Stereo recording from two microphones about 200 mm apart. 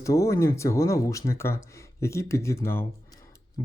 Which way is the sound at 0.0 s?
15° left (ahead or behind).